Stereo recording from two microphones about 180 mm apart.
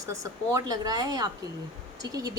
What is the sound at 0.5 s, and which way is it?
Speech, 20° right (ahead or behind).